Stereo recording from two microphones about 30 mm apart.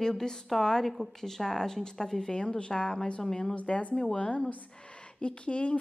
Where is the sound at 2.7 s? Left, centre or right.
Left.